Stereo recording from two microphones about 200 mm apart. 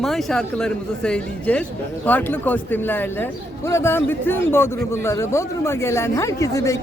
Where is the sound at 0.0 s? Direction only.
Centre (ahead or behind).